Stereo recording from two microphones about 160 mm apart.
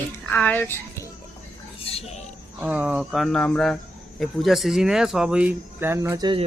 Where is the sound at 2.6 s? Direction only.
10° right (ahead or behind).